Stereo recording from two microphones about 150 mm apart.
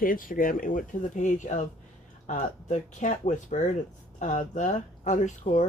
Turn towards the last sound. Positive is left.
turn(degrees=50)  # may be behind; listen again after turning